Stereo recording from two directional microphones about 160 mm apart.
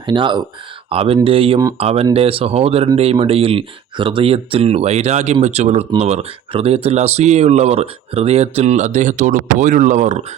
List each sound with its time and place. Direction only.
0.0 s speech: 30° right (ahead or behind); by 10.2 s 50° right (ahead or behind)